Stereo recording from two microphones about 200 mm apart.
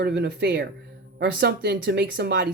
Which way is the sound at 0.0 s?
55° right (ahead or behind).